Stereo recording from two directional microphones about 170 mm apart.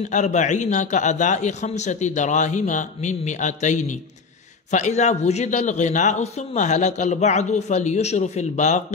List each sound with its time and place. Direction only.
0.1 s a man's voice: 45° left (ahead or behind)